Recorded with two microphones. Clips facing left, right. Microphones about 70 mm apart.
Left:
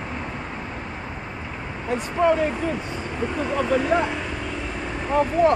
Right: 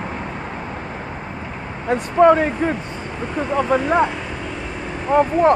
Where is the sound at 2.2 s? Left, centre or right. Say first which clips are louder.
Right 7 dB; right.